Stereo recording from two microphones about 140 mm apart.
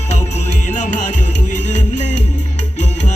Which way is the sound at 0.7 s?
60° left (ahead or behind).